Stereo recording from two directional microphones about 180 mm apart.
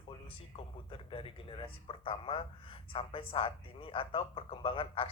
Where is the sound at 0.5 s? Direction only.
30° left (ahead or behind).